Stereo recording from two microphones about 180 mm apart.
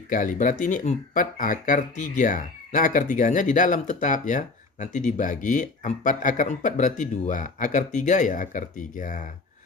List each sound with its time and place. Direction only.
0.1 s speech: 45° left (ahead or behind)